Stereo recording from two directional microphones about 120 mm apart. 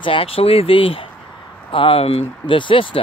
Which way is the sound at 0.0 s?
50° left (ahead or behind).